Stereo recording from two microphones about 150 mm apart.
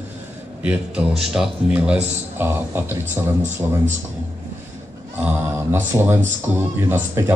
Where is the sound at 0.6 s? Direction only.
5° right (ahead or behind).